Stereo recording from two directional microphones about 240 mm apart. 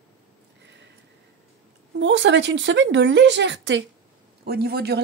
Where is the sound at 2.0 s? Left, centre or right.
Right.